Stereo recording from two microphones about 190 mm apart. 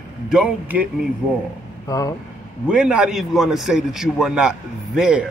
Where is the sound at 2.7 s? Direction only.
5° right (ahead or behind).